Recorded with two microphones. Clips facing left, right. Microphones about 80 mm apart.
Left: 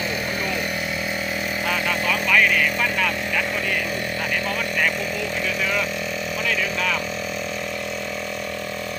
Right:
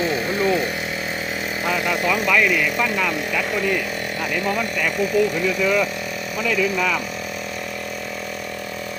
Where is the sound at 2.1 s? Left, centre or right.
Centre.